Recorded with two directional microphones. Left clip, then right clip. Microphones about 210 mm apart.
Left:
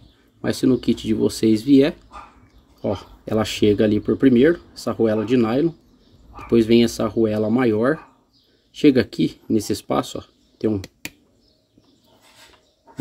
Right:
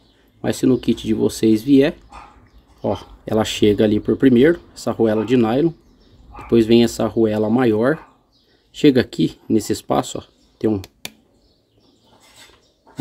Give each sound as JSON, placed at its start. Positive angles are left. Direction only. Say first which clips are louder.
{"t": 0.4, "sound": "speech", "louder": "right 2 dB", "side_deg": -5}